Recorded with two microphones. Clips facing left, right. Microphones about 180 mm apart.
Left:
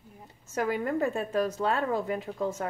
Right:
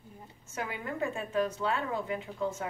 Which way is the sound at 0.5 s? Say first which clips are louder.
Left 7 dB; 40° left (ahead or behind).